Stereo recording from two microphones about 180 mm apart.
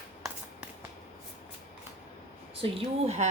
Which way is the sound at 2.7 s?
35° right (ahead or behind).